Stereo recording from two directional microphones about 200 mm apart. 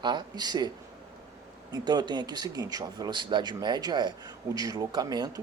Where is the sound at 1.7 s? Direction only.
20° right (ahead or behind).